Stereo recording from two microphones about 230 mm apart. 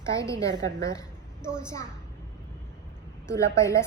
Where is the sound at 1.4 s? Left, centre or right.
Centre.